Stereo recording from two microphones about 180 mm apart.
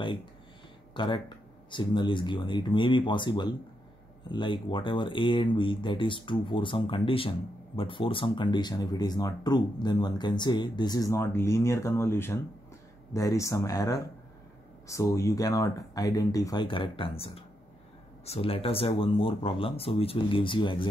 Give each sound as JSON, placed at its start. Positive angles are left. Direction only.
{"t": 0.0, "sound": "speech", "side_deg": 25}